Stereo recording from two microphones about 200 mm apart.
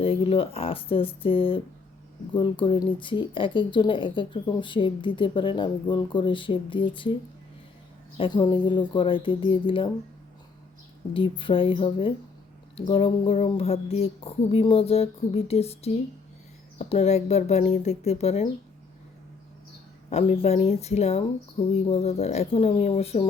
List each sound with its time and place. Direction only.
0.0 s speech: 25° left (ahead or behind)
8.2 s speech: 25° left (ahead or behind)
11.1 s speech: 25° left (ahead or behind)
20.1 s speech: 30° left (ahead or behind)